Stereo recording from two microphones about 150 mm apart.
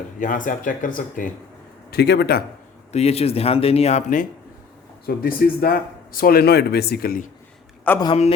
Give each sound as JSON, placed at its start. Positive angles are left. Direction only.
{"t": 0.2, "sound": "speech", "side_deg": 60}
{"t": 1.9, "sound": "speech", "side_deg": 90}
{"t": 2.9, "sound": "speech", "side_deg": 45}
{"t": 5.0, "sound": "speech", "side_deg": 80}
{"t": 7.9, "sound": "a man's voice", "side_deg": 10}